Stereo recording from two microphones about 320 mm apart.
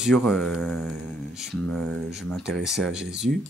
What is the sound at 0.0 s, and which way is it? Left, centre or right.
Speech, centre.